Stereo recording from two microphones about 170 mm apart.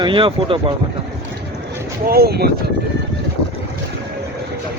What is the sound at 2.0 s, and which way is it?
Speech, 65° right (ahead or behind).